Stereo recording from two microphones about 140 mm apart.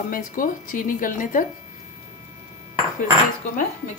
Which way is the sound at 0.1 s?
75° left (ahead or behind).